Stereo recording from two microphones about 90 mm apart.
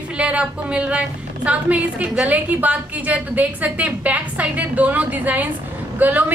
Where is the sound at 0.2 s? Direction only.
15° right (ahead or behind).